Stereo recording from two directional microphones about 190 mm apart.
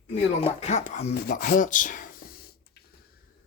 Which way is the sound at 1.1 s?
55° left (ahead or behind).